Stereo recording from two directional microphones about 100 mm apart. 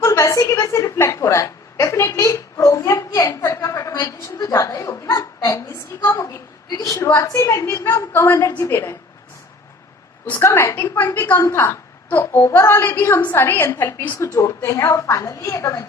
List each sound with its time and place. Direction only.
0.0 s a woman's voice: 30° left (ahead or behind)
10.3 s a woman's voice: 25° left (ahead or behind)